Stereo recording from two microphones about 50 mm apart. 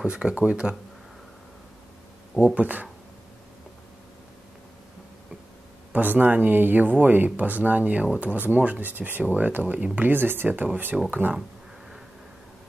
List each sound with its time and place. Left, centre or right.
0.0 s speech: right
2.4 s speech: right
5.9 s speech: right
9.9 s speech: right